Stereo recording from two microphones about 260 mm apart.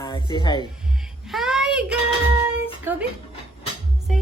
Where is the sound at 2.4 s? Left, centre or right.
Centre.